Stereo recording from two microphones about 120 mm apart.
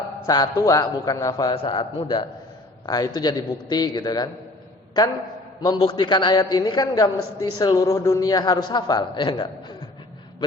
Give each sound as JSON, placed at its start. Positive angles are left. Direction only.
{"t": 0.3, "sound": "a woman's voice", "side_deg": 30}
{"t": 1.5, "sound": "a man's voice", "side_deg": 45}
{"t": 5.6, "sound": "a woman's voice", "side_deg": 40}